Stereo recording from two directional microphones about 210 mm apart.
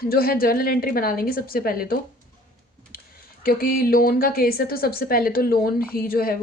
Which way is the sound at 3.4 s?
45° left (ahead or behind).